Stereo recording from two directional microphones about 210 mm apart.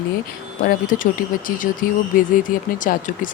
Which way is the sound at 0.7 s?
40° left (ahead or behind).